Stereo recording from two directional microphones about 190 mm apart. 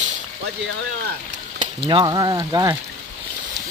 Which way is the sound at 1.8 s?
25° right (ahead or behind).